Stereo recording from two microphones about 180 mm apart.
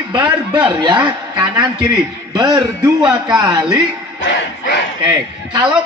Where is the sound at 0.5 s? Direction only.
25° right (ahead or behind).